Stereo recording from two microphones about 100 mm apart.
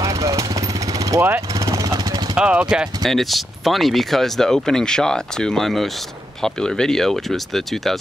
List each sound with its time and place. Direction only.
0.0 s vehicle: 35° right (ahead or behind)
1.9 s vehicle: 45° right (ahead or behind)
2.3 s speech: 10° right (ahead or behind)